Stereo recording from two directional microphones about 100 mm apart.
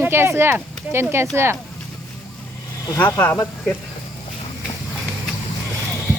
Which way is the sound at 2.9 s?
20° left (ahead or behind).